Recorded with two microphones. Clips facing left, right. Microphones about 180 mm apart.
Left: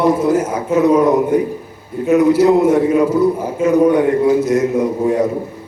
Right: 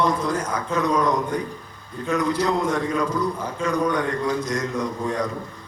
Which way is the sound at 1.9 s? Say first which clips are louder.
Left 11 dB; 10° left (ahead or behind).